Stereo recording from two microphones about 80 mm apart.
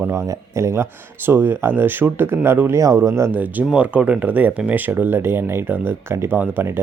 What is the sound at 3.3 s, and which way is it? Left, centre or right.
Speech, right.